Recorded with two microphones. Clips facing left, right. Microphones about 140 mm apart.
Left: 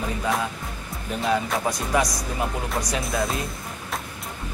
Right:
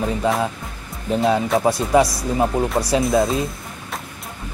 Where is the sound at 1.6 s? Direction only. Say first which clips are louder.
Right 7 dB; 30° right (ahead or behind).